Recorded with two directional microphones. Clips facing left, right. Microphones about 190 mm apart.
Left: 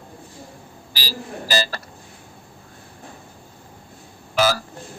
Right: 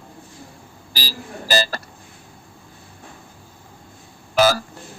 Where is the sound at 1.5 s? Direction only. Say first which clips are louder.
Right 2 dB; 45° right (ahead or behind).